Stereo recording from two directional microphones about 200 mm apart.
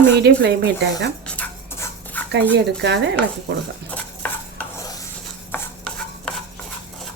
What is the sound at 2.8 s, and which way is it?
Stir, 60° right (ahead or behind).